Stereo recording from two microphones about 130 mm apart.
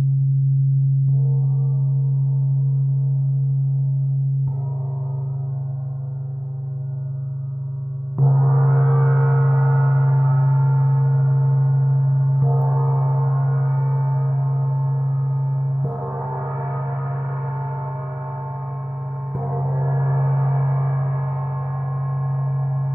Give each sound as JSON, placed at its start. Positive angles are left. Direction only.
{"t": 8.3, "sound": "gong", "side_deg": -5}
{"t": 19.5, "sound": "gong", "side_deg": -15}